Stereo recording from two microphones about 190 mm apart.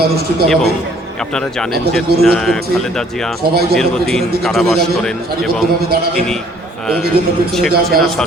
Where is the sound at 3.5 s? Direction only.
55° right (ahead or behind).